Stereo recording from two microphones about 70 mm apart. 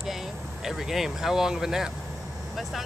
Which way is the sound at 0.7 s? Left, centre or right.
Centre.